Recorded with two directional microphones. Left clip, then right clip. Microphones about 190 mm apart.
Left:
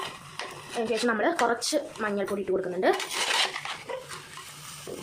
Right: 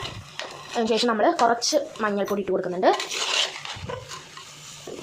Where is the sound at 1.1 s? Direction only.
5° right (ahead or behind).